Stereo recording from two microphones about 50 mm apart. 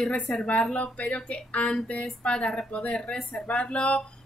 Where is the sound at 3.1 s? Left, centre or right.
Centre.